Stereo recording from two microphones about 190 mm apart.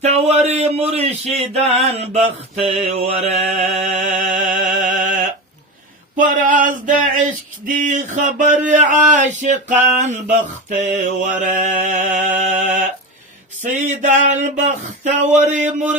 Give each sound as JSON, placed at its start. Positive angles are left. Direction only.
{"t": 0.0, "sound": "mantra", "side_deg": -35}
{"t": 6.1, "sound": "a sound", "side_deg": -45}
{"t": 7.7, "sound": "mantra", "side_deg": -40}